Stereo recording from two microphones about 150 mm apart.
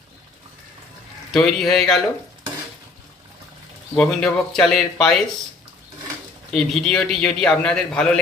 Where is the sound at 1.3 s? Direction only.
Centre (ahead or behind).